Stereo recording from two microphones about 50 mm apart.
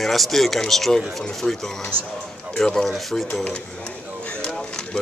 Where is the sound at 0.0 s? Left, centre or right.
Centre.